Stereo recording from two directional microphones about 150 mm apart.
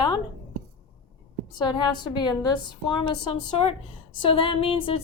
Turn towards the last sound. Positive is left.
turn(degrees=35)  # may be behind; listen again after turning